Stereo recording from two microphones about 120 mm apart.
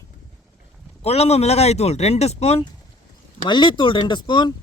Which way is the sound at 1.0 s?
60° left (ahead or behind).